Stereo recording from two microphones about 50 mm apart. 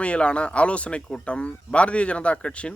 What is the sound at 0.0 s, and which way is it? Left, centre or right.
Speech, left.